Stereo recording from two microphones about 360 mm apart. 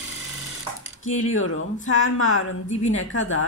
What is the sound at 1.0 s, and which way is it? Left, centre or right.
Music, left.